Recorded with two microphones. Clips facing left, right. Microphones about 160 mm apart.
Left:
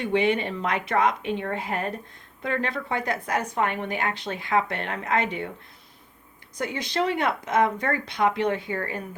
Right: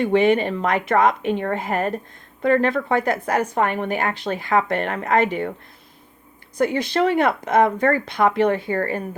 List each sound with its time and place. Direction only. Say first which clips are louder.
0.0 s a woman's voice: right 6 dB; 45° right (ahead or behind)
6.6 s a woman's voice: right 7 dB; 55° right (ahead or behind)